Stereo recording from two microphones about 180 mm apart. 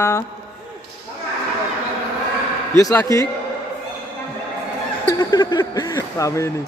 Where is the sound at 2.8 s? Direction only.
20° left (ahead or behind).